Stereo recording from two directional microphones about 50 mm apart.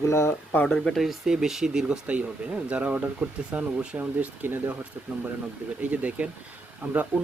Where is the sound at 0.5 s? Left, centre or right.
Left.